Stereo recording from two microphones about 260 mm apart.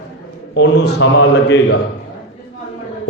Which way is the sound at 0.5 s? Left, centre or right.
Left.